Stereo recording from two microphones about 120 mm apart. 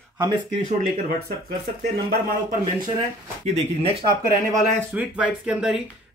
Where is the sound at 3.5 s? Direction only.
55° right (ahead or behind).